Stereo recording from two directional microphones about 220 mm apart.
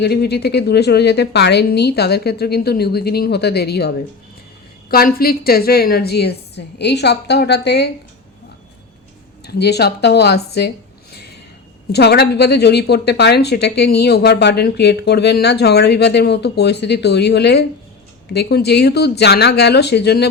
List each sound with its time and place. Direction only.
0.0 s a woman's voice: 50° left (ahead or behind)
9.5 s a woman's voice: 50° left (ahead or behind)
11.9 s a woman's voice: 50° left (ahead or behind)